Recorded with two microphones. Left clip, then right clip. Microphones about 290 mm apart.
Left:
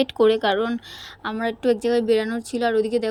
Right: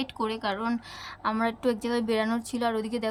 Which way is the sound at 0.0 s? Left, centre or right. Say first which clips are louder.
Left 12 dB; centre.